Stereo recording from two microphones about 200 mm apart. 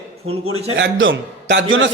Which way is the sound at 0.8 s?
65° right (ahead or behind).